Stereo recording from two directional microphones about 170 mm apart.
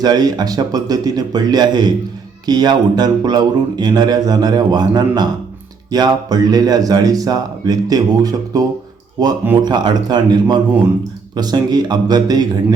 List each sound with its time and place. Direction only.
0.0 s speech: 25° right (ahead or behind)
9.6 s speech: 25° right (ahead or behind)